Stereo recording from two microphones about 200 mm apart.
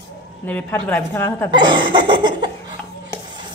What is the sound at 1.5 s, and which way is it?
Speech, 25° right (ahead or behind).